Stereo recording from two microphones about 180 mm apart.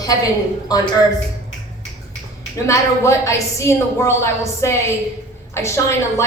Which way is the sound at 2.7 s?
15° left (ahead or behind).